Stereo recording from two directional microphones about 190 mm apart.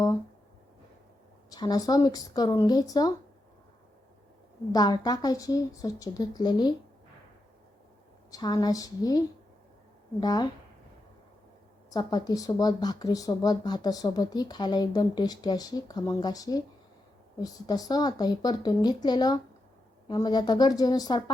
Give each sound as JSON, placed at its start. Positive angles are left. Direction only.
{"t": 1.5, "sound": "speech", "side_deg": 20}
{"t": 4.7, "sound": "speech", "side_deg": 20}
{"t": 8.3, "sound": "speech", "side_deg": 20}
{"t": 11.9, "sound": "speech", "side_deg": 20}